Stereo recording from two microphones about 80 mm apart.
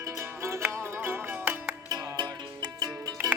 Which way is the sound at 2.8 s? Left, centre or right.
Right.